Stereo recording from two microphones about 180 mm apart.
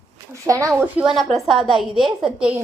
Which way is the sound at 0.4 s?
20° right (ahead or behind).